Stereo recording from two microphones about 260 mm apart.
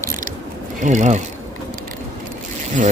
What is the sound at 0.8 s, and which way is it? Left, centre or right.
Speech, right.